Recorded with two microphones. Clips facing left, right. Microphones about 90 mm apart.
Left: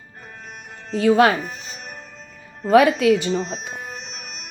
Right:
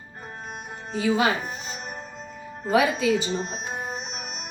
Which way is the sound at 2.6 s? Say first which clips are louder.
Left 7 dB; 65° left (ahead or behind).